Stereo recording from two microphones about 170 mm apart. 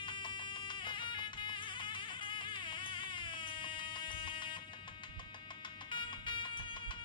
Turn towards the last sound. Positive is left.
turn(degrees=30)  # may be behind; listen again after turning